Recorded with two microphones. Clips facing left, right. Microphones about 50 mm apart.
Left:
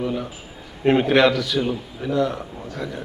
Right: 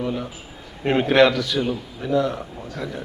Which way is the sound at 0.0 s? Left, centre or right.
Centre.